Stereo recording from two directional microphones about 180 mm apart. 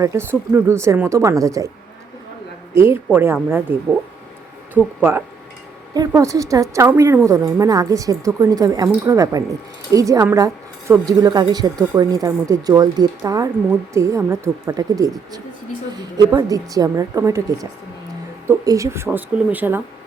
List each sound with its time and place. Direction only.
0.0 s speech: 15° right (ahead or behind)
2.7 s speech: 15° right (ahead or behind)
4.8 s speech: 5° left (ahead or behind)
5.9 s a woman's voice: 20° right (ahead or behind)
16.3 s a woman's voice: 20° right (ahead or behind)